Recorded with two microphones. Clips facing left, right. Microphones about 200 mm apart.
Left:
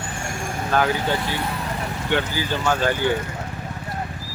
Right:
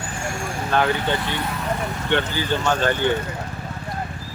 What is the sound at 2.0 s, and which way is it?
Speech, 10° left (ahead or behind).